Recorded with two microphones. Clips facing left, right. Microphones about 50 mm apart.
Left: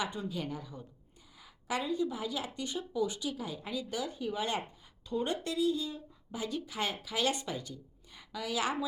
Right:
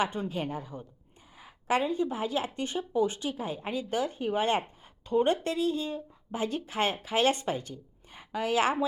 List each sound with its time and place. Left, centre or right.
0.0 s a woman's voice: right